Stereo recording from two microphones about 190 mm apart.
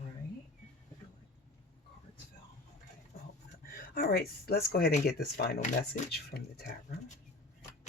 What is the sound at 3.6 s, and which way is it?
Speech, 50° left (ahead or behind).